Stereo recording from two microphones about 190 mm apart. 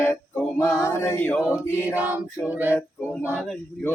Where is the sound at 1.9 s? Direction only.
10° right (ahead or behind).